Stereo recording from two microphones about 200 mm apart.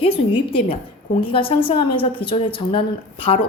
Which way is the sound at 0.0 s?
25° left (ahead or behind).